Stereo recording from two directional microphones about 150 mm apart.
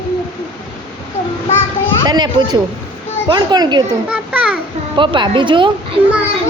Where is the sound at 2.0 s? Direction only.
30° right (ahead or behind).